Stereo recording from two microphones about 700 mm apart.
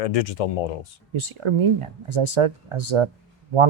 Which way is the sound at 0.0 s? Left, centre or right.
Left.